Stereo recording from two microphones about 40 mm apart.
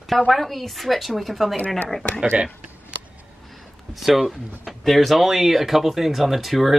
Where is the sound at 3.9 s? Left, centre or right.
Centre.